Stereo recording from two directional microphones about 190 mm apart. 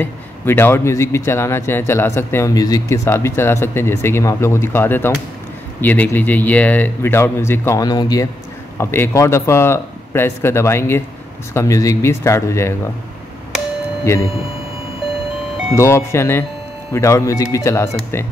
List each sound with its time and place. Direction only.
0.0 s a man's voice: 10° left (ahead or behind)
15.7 s a man's voice: 15° left (ahead or behind)